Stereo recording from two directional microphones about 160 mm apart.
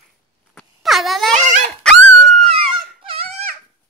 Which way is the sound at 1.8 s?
5° left (ahead or behind).